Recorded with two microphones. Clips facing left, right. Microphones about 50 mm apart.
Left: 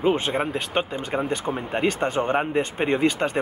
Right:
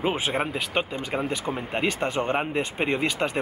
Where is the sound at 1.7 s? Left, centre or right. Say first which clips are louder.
Left 3 dB; centre.